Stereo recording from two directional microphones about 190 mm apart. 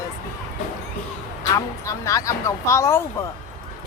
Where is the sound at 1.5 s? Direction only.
15° left (ahead or behind).